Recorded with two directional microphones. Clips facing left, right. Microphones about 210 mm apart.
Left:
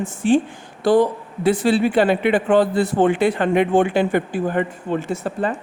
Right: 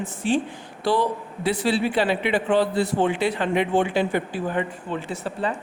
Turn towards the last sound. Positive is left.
turn(degrees=45)  # may be behind; listen again after turning